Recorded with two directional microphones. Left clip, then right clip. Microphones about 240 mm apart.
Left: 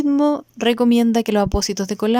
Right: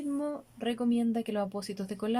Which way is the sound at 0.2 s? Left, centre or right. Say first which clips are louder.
Left 17 dB; left.